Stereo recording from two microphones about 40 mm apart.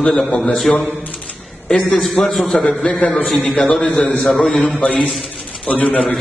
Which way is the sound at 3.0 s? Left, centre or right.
Left.